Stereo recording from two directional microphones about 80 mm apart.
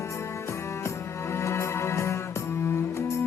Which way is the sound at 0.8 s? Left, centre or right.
Left.